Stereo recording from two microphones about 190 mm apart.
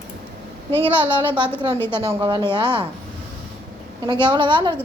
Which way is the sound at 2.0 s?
25° right (ahead or behind).